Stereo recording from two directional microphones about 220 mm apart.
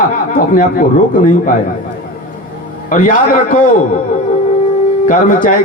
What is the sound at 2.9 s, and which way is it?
Speech, 35° left (ahead or behind).